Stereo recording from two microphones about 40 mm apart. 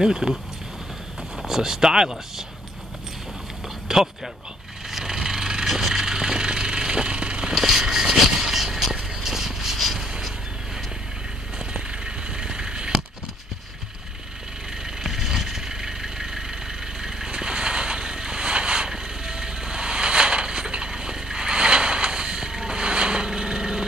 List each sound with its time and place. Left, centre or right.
0.0 s speech: centre
1.5 s speech: centre
3.6 s a sound: centre
4.9 s vehicle: centre
7.5 s vehicle: centre
11.5 s a sound: right
14.7 s vehicle: centre